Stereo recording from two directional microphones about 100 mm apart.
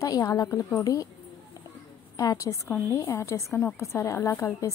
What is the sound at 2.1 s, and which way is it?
A woman's voice, 35° left (ahead or behind).